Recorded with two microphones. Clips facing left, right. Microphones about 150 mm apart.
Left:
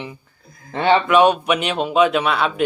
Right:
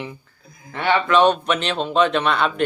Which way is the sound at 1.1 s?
10° left (ahead or behind).